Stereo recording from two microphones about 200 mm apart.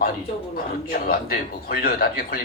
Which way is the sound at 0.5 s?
50° left (ahead or behind).